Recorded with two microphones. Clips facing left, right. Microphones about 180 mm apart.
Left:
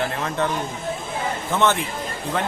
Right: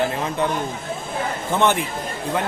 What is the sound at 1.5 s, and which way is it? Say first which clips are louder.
Speech: right 1 dB; 15° right (ahead or behind).